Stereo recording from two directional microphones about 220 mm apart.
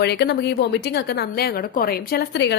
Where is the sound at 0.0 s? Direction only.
45° left (ahead or behind).